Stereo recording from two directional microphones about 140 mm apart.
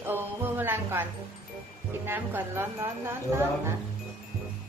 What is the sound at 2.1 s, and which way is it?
Speech, 15° right (ahead or behind).